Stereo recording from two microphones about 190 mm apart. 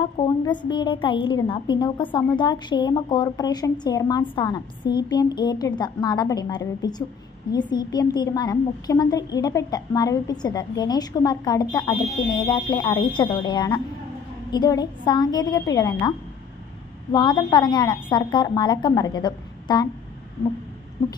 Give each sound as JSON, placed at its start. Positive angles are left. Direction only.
{"t": 0.0, "sound": "a woman's voice", "side_deg": 25}